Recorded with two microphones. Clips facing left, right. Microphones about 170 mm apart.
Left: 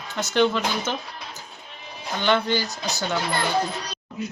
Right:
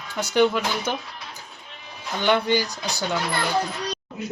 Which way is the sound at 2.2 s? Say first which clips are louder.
Right 1 dB; 15° right (ahead or behind).